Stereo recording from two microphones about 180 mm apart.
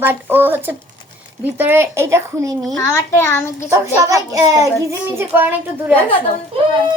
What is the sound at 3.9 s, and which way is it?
A child's voice, 15° right (ahead or behind).